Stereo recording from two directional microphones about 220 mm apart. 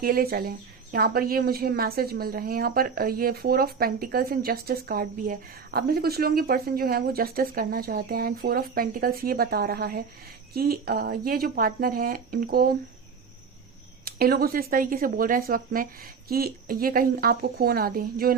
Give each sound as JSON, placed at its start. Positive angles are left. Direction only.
{"t": 0.0, "sound": "speech", "side_deg": -40}
{"t": 14.0, "sound": "speech", "side_deg": -45}